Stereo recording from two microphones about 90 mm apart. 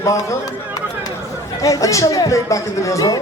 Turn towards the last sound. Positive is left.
turn(degrees=40)  # may be behind; listen again after turning